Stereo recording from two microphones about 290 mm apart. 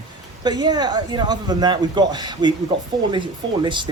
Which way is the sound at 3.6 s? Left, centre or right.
Centre.